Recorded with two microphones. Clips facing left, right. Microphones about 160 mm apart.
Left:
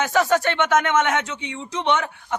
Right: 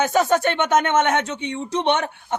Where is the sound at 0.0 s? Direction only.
25° right (ahead or behind).